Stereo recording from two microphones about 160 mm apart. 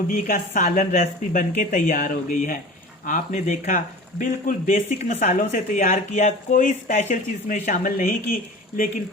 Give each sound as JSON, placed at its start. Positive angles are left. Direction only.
{"t": 0.1, "sound": "speech", "side_deg": 60}